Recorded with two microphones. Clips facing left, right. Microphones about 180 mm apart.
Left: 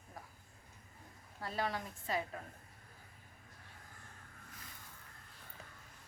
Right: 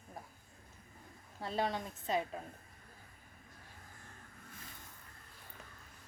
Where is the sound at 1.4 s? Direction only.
25° right (ahead or behind).